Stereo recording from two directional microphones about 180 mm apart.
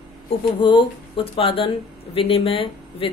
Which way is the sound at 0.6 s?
30° left (ahead or behind).